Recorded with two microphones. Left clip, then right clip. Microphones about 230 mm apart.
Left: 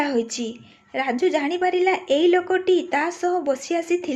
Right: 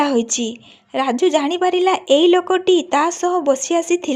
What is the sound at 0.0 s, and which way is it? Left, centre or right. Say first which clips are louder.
A woman's voice: right 6 dB; right.